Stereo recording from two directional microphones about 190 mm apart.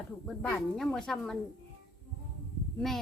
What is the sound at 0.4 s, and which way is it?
Speech, 5° left (ahead or behind).